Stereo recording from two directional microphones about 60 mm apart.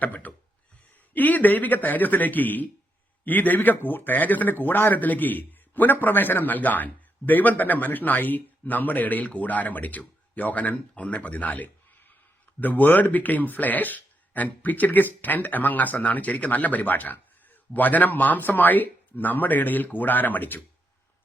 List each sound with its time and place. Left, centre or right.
0.0 s speech: left